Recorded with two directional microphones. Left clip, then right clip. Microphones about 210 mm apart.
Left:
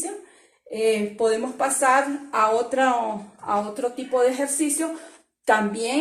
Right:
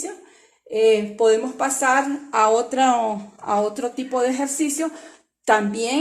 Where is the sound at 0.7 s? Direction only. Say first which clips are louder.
Right 5 dB; 45° right (ahead or behind).